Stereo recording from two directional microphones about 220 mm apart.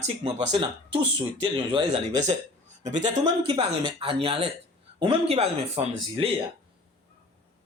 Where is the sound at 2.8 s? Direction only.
35° right (ahead or behind).